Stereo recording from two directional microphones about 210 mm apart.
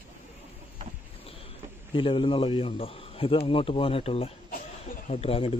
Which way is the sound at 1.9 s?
25° left (ahead or behind).